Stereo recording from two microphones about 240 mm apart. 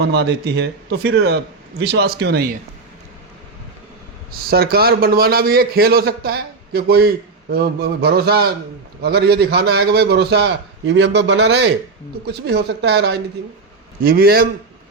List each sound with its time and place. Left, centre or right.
0.0 s a man's voice: right
4.3 s a man's voice: right